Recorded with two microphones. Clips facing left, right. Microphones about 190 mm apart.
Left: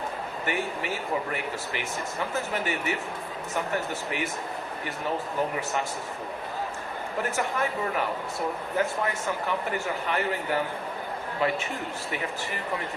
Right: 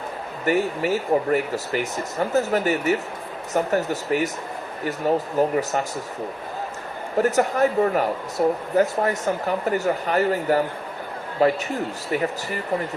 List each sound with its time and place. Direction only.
0.4 s speech: 40° right (ahead or behind)
7.2 s speech: 40° right (ahead or behind)